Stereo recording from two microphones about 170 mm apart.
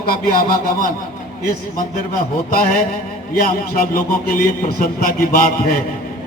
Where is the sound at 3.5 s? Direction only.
60° left (ahead or behind).